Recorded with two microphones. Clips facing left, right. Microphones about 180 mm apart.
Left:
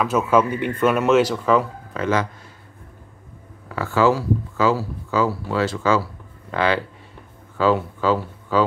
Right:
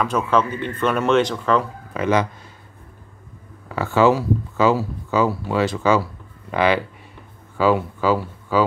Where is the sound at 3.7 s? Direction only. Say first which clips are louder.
Right 2 dB; 20° right (ahead or behind).